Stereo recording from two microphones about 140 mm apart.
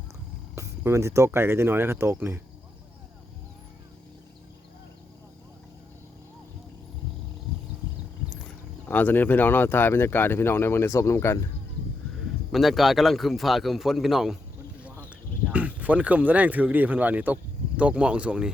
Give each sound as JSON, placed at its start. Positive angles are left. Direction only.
{"t": 0.5, "sound": "speech", "side_deg": -20}
{"t": 8.9, "sound": "speech", "side_deg": 15}
{"t": 12.5, "sound": "speech", "side_deg": 0}
{"t": 14.8, "sound": "a sound", "side_deg": -10}
{"t": 17.7, "sound": "speech", "side_deg": -10}